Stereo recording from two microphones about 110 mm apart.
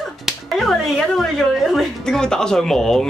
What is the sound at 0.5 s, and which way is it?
A woman's voice, centre (ahead or behind).